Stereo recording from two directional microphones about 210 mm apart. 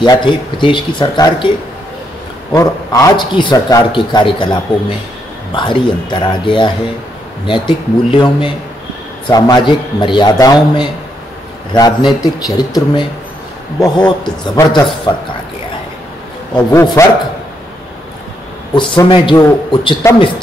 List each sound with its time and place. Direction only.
0.0 s a man's voice: 20° left (ahead or behind)
2.5 s a man's voice: 15° left (ahead or behind)
13.9 s a man's voice: 5° left (ahead or behind)
14.5 s a man's voice: 20° left (ahead or behind)
16.5 s a man's voice: 15° left (ahead or behind)
18.8 s a man's voice: 20° left (ahead or behind)